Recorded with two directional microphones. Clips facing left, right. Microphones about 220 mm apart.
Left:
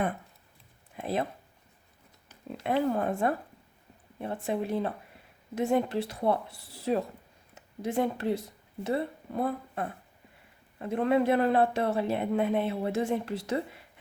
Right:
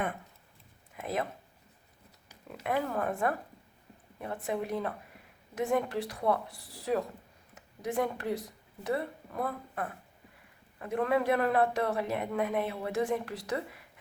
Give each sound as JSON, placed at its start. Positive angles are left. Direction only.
{"t": 0.9, "sound": "speech", "side_deg": 30}
{"t": 2.6, "sound": "speech", "side_deg": 25}